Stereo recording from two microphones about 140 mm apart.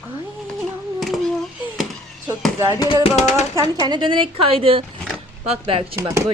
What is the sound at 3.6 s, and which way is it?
A woman's voice, 30° right (ahead or behind).